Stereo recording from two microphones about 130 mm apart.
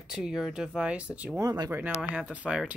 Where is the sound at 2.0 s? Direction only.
10° right (ahead or behind).